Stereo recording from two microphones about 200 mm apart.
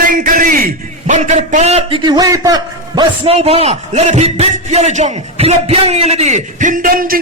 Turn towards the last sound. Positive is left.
turn(degrees=-45)  # may be behind; listen again after turning